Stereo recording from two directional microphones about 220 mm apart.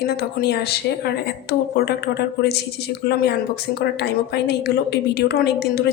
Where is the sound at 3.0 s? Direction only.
50° left (ahead or behind).